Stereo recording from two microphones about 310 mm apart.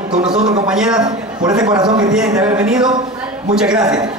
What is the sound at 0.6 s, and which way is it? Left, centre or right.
Speech, centre.